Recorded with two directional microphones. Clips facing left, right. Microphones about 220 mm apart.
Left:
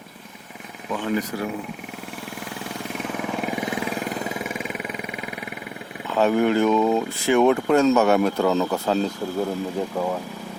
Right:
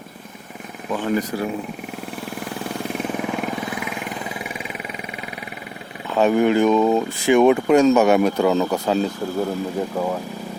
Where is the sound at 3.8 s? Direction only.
35° left (ahead or behind); by 5.4 s 55° left (ahead or behind).